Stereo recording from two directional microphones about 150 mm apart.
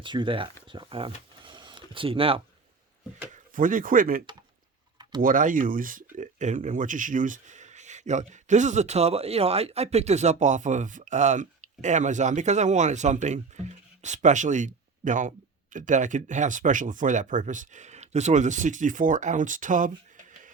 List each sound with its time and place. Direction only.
0.0 s speech: 35° right (ahead or behind)
3.5 s speech: 65° right (ahead or behind)
5.2 s speech: 65° right (ahead or behind)